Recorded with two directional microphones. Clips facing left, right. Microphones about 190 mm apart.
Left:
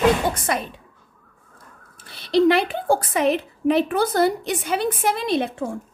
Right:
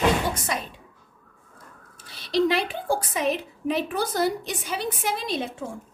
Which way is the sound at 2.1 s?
60° left (ahead or behind).